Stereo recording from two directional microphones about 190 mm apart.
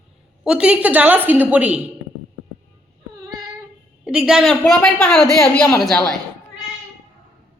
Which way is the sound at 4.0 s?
5° right (ahead or behind).